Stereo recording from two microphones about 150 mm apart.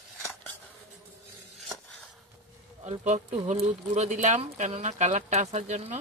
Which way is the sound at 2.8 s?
50° right (ahead or behind).